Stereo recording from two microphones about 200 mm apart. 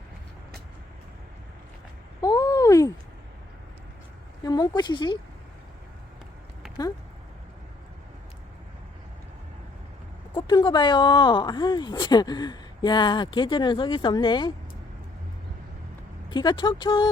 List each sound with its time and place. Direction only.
2.2 s a sound: 15° left (ahead or behind)
4.4 s speech: 20° left (ahead or behind)
10.3 s speech: 20° left (ahead or behind)
16.3 s speech: 25° left (ahead or behind)